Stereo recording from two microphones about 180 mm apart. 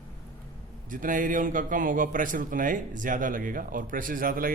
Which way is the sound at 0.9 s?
50° right (ahead or behind).